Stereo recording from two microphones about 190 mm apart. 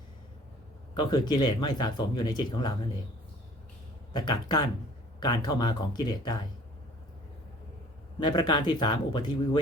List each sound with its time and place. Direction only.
0.9 s speech: 25° left (ahead or behind)
4.1 s speech: 20° left (ahead or behind)
8.2 s speech: 20° left (ahead or behind)